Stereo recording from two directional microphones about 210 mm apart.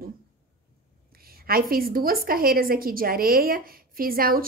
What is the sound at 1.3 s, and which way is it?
A woman's voice, 45° right (ahead or behind).